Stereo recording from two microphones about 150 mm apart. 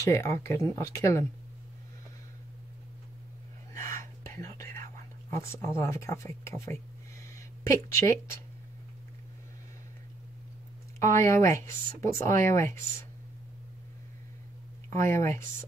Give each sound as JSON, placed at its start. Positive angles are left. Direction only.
{"t": 0.1, "sound": "speech", "side_deg": 20}
{"t": 3.7, "sound": "whispering", "side_deg": 20}
{"t": 5.3, "sound": "speech", "side_deg": 20}
{"t": 11.2, "sound": "speech", "side_deg": 20}
{"t": 14.9, "sound": "speech", "side_deg": 20}